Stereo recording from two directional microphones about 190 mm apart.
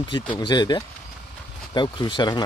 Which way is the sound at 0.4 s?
20° left (ahead or behind).